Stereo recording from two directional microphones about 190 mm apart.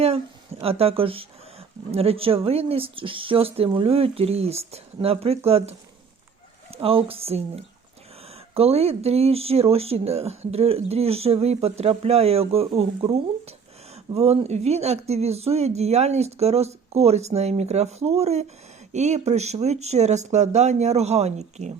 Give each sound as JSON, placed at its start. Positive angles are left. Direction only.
{"t": 0.6, "sound": "speech", "side_deg": -30}
{"t": 6.7, "sound": "speech", "side_deg": -30}